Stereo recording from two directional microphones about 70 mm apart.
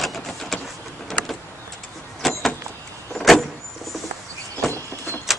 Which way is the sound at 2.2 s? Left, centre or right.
Centre.